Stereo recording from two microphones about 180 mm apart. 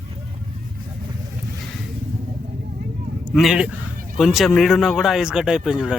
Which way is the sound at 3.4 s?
5° right (ahead or behind).